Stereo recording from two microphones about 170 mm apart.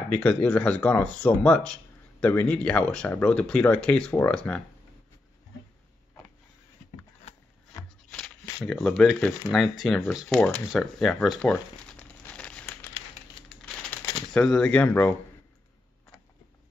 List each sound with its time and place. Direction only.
0.1 s speech: 10° left (ahead or behind)
7.3 s a sound: 40° left (ahead or behind)
8.6 s speech: 5° left (ahead or behind)
11.5 s crumpling: 10° left (ahead or behind)
14.3 s speech: 5° left (ahead or behind)